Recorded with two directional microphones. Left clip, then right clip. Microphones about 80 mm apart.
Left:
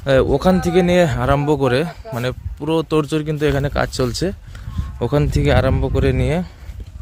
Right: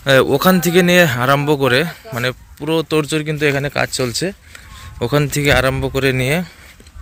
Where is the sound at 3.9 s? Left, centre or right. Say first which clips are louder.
Right 1 dB; left.